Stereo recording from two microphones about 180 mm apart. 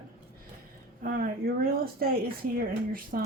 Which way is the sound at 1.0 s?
55° right (ahead or behind).